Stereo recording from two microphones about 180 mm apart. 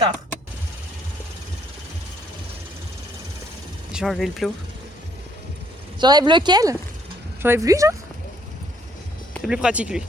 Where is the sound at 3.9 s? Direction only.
Centre (ahead or behind).